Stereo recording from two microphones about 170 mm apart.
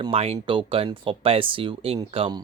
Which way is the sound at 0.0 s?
35° right (ahead or behind).